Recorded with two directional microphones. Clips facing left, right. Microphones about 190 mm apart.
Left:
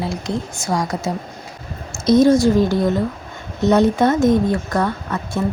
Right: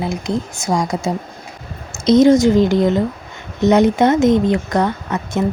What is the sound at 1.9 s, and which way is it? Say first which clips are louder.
Speech: right 2 dB; 20° right (ahead or behind).